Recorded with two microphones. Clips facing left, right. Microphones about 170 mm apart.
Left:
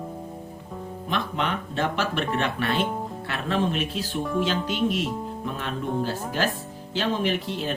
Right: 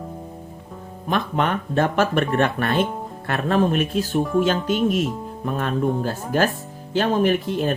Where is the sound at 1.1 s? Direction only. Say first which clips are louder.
Right 6 dB; 50° right (ahead or behind).